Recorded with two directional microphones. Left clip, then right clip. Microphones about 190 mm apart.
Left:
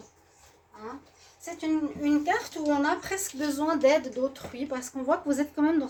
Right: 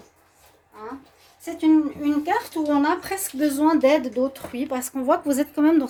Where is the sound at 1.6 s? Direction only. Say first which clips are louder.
Right 10 dB; 25° right (ahead or behind).